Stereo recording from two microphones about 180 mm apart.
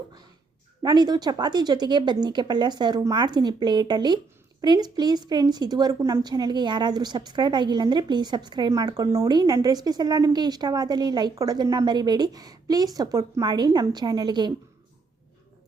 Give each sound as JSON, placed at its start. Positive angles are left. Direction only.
{"t": 0.8, "sound": "a woman's voice", "side_deg": -25}